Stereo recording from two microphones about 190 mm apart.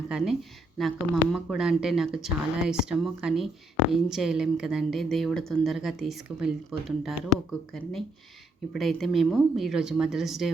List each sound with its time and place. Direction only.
0.8 s speech: centre (ahead or behind)